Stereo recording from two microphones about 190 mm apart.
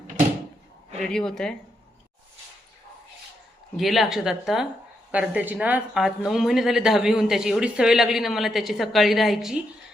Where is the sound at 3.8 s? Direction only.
Centre (ahead or behind).